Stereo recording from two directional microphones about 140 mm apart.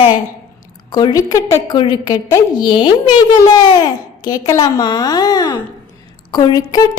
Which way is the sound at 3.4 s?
30° left (ahead or behind).